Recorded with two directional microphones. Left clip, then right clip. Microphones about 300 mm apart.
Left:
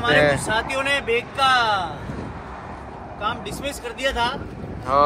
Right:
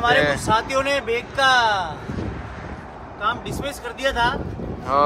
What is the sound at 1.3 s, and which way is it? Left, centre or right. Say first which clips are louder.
Speech: right 2 dB; right.